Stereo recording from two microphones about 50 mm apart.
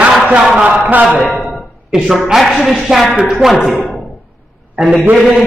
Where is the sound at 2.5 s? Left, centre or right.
Centre.